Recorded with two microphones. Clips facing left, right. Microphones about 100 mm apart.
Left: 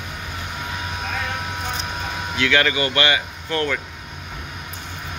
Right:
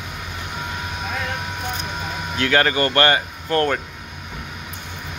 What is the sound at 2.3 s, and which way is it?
Speech, 40° right (ahead or behind).